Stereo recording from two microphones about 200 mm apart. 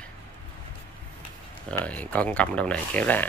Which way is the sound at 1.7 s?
5° left (ahead or behind).